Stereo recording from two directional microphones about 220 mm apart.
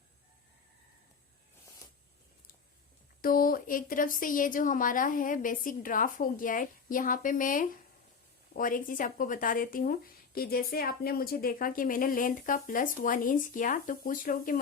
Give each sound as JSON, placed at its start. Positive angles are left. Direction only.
{"t": 3.2, "sound": "speech", "side_deg": 40}